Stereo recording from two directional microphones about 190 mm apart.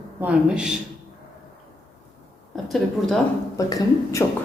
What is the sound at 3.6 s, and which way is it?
Speech, 20° left (ahead or behind).